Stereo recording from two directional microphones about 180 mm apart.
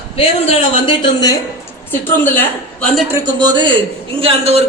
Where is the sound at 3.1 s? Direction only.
20° right (ahead or behind).